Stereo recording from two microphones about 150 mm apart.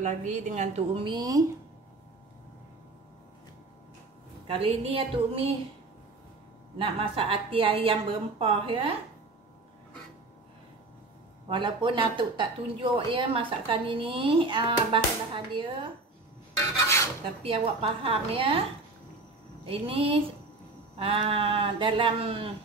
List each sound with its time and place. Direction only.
0.0 s a woman's voice: 55° right (ahead or behind); by 1.4 s 30° right (ahead or behind)
4.5 s a woman's voice: 35° right (ahead or behind)
6.8 s a woman's voice: 40° right (ahead or behind)
11.4 s a woman's voice: 35° right (ahead or behind)
16.7 s filing: 20° left (ahead or behind)
17.4 s a woman's voice: 40° right (ahead or behind)